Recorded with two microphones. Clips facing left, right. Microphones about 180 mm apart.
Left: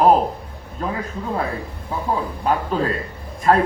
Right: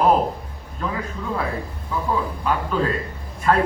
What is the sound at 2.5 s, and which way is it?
A man's voice, 40° left (ahead or behind).